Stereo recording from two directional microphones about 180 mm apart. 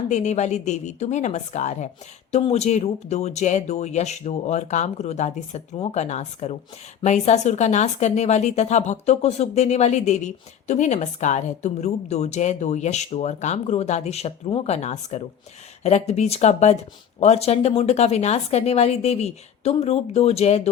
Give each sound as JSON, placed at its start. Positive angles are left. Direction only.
{"t": 0.1, "sound": "speech", "side_deg": 40}